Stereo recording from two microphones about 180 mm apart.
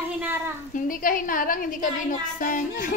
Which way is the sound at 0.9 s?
50° left (ahead or behind).